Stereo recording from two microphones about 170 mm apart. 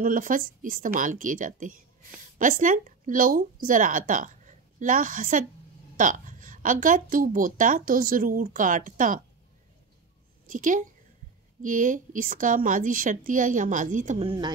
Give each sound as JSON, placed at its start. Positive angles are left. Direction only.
{"t": 0.0, "sound": "a woman's voice", "side_deg": -50}
{"t": 10.4, "sound": "a woman's voice", "side_deg": -50}
{"t": 14.2, "sound": "speech", "side_deg": -30}